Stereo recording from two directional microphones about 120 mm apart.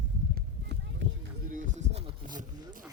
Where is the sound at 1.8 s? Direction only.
60° right (ahead or behind).